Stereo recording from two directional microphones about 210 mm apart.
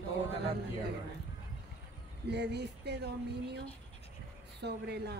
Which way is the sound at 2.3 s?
55° right (ahead or behind).